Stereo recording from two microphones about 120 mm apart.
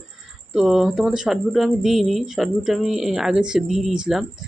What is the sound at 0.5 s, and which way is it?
Speech, centre (ahead or behind).